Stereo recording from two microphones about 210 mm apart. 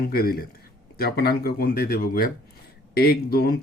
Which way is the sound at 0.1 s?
45° left (ahead or behind).